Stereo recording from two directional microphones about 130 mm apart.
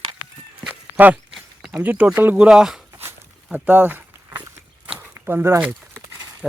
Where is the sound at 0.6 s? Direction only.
10° right (ahead or behind).